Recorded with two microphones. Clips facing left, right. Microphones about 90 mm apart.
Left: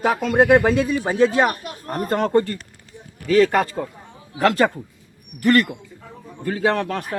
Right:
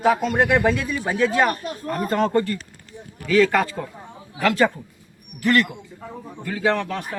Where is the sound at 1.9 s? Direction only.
40° left (ahead or behind).